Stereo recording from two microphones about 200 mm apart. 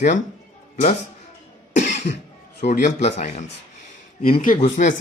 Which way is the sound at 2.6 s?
35° left (ahead or behind).